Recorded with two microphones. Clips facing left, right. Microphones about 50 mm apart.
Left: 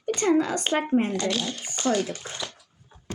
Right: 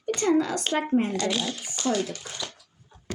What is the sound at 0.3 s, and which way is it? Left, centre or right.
Speech, left.